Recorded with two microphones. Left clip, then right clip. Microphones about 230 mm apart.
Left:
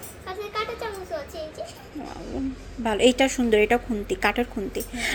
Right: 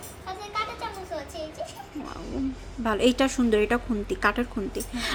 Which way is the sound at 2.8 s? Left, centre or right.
Centre.